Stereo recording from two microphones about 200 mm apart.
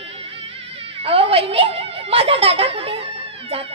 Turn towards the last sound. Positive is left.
turn(degrees=-30)  # may be behind; listen again after turning